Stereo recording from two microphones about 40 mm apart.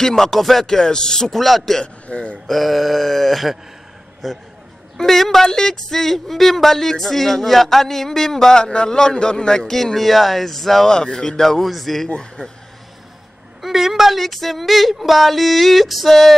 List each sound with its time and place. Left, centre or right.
0.0 s speech: centre
0.7 s speech: centre
1.3 s speech: centre
2.0 s speech: left
2.4 s speech: centre; by 9.7 s left
9.7 s speech: centre
10.9 s speech: centre
11.6 s speech: centre
12.4 s speech: left
13.6 s speech: centre